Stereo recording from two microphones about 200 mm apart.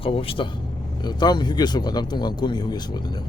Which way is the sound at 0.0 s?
25° left (ahead or behind).